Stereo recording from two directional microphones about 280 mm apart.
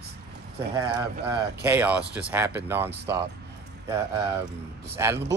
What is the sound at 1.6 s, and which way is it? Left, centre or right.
Speech, centre.